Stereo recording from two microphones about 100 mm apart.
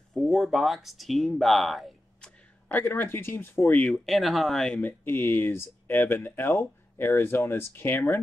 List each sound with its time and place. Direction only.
0.3 s speech: centre (ahead or behind)
2.7 s speech: 20° left (ahead or behind)
3.9 s speech: centre (ahead or behind)
4.8 s speech: 20° left (ahead or behind)